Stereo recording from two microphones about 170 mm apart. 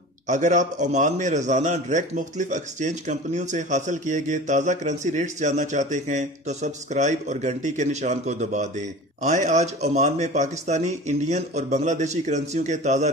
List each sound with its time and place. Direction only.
0.3 s a man's voice: 45° right (ahead or behind)